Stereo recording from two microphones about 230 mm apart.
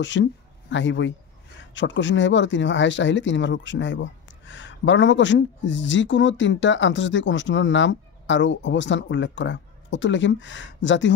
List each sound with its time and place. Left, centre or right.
0.0 s speech: left